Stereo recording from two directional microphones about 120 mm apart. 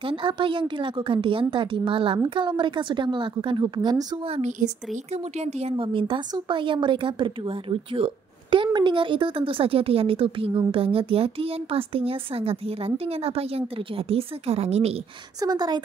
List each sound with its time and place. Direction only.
0.0 s a woman's voice: 45° right (ahead or behind)
4.4 s speech: 90° right
5.1 s a woman's voice: 65° right (ahead or behind)
15.4 s a woman's voice: 35° right (ahead or behind)